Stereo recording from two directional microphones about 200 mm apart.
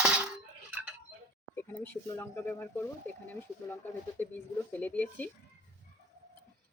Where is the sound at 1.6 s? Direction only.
10° left (ahead or behind).